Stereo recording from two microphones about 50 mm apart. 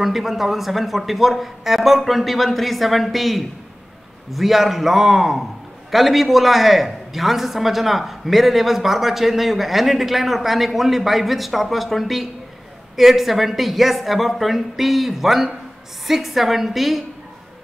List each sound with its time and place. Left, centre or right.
0.0 s a man's voice: centre